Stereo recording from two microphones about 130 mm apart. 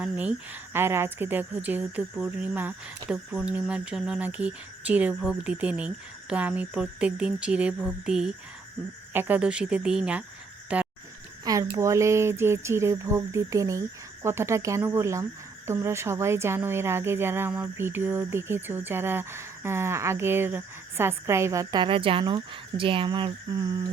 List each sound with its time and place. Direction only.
0.0 s a woman's voice: 10° right (ahead or behind)
10.7 s goat: 10° right (ahead or behind)
11.4 s speech: 30° right (ahead or behind)
23.5 s speech: 30° right (ahead or behind)